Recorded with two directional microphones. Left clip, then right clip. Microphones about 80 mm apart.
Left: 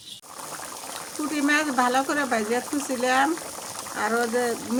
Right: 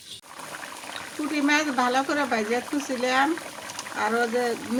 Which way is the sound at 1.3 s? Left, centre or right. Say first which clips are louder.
Even; centre.